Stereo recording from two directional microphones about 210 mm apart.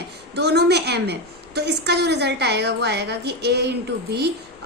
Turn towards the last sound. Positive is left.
turn(degrees=-55)  # may be behind; listen again after turning